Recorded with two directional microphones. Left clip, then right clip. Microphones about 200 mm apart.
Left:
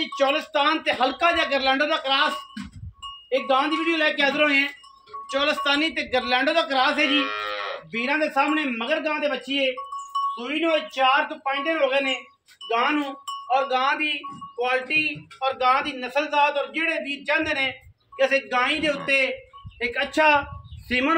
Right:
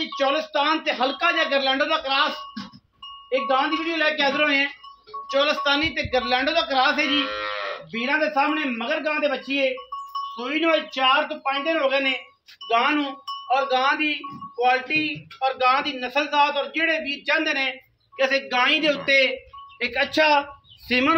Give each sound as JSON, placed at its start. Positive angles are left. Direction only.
{"t": 0.0, "sound": "speech", "side_deg": 10}
{"t": 7.1, "sound": "speech", "side_deg": 45}
{"t": 7.9, "sound": "speech", "side_deg": 5}
{"t": 10.3, "sound": "a man's voice", "side_deg": -10}